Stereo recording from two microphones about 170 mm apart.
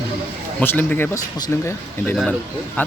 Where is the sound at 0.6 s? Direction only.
10° left (ahead or behind).